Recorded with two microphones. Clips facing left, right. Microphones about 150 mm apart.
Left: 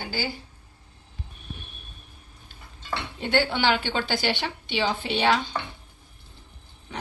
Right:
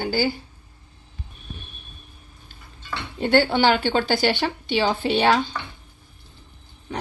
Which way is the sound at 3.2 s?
40° right (ahead or behind).